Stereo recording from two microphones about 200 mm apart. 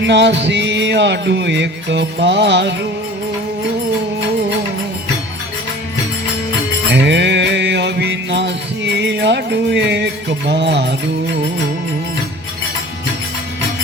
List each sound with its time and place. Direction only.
0.0 s music: 60° right (ahead or behind)
6.9 s mantra: 60° right (ahead or behind)